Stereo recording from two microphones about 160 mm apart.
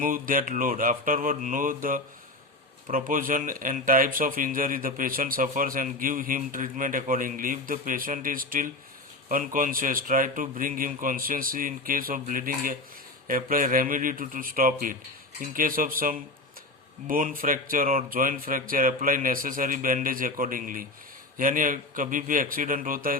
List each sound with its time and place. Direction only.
0.0 s speech: 60° right (ahead or behind)